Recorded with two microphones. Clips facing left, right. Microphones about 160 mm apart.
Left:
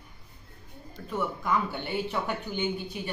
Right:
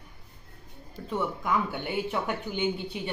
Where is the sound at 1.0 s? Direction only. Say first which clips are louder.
Right 1 dB; 20° right (ahead or behind).